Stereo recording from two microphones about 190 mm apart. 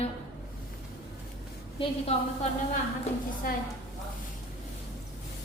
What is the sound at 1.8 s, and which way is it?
Speech, 30° left (ahead or behind).